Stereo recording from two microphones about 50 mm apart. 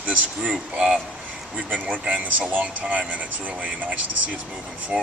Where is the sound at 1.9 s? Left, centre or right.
Right.